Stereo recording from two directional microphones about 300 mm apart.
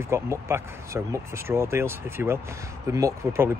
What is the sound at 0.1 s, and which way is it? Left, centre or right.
Speech, centre.